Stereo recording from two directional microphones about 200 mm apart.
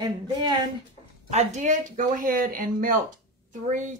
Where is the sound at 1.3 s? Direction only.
35° right (ahead or behind).